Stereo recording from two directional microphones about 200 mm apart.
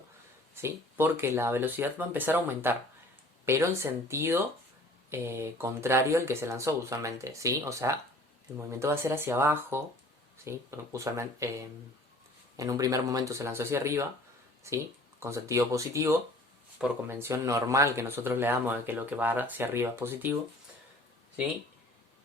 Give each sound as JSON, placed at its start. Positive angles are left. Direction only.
{"t": 0.5, "sound": "speech", "side_deg": -10}